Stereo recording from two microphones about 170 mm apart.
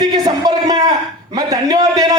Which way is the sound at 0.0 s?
25° right (ahead or behind).